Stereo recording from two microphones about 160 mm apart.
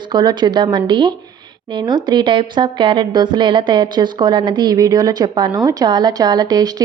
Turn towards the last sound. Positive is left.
turn(degrees=-25)  # may be behind; listen again after turning